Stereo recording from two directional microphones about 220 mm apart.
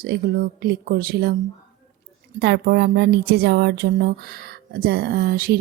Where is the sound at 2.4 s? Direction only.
50° right (ahead or behind).